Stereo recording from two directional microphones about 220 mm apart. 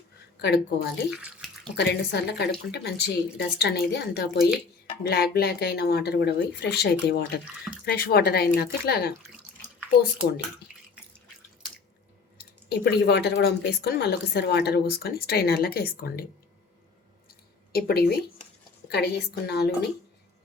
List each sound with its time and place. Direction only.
0.4 s speech: 50° left (ahead or behind)
12.4 s speech: 45° left (ahead or behind)
17.7 s speech: 45° left (ahead or behind)